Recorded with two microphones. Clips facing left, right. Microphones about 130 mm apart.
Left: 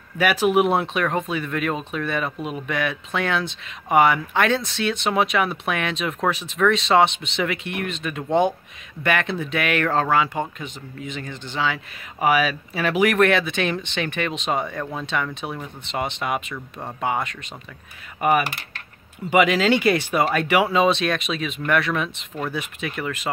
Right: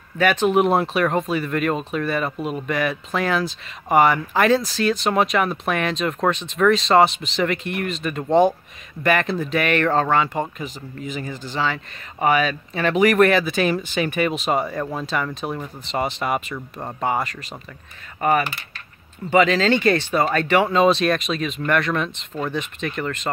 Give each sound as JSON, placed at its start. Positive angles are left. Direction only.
{"t": 0.2, "sound": "speech", "side_deg": 5}
{"t": 18.2, "sound": "typing", "side_deg": 10}
{"t": 19.3, "sound": "speech", "side_deg": 10}